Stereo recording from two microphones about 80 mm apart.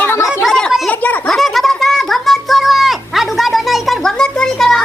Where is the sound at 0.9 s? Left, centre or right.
Left.